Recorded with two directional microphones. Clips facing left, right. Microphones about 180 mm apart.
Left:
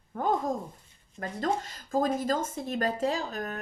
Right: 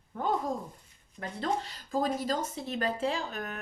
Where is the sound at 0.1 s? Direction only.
45° left (ahead or behind).